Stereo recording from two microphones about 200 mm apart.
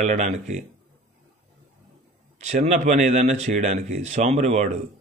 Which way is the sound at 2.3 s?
35° right (ahead or behind).